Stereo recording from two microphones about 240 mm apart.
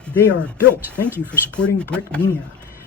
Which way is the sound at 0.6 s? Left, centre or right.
Centre.